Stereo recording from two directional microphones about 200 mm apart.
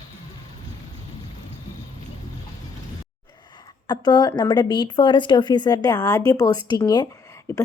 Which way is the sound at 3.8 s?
20° left (ahead or behind).